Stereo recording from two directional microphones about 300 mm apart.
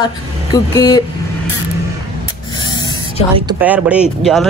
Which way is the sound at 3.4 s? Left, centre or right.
Centre.